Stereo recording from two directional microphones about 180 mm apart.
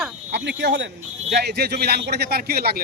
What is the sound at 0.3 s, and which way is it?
Speech, 80° right.